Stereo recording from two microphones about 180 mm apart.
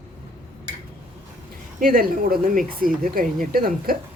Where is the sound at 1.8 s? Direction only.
55° right (ahead or behind).